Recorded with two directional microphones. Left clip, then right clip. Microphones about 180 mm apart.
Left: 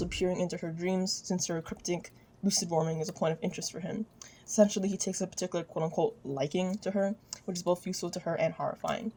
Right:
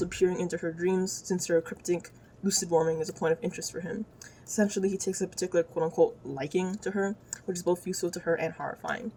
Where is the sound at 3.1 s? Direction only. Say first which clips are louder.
Right 3 dB; 35° left (ahead or behind).